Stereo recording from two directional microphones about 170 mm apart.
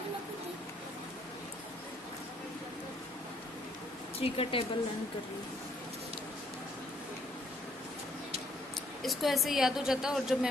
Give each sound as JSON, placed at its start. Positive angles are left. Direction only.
{"t": 4.2, "sound": "speech", "side_deg": 35}
{"t": 9.0, "sound": "a woman's voice", "side_deg": 0}